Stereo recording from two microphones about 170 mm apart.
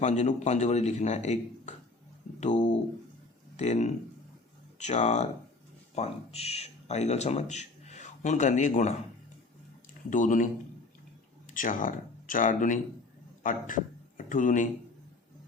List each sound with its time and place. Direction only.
0.0 s a man's voice: 45° left (ahead or behind)
3.6 s speech: 40° left (ahead or behind)
10.1 s speech: 50° left (ahead or behind)
11.5 s speech: 50° left (ahead or behind)